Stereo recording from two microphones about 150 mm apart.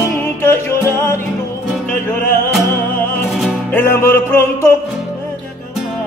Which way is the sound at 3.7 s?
15° left (ahead or behind).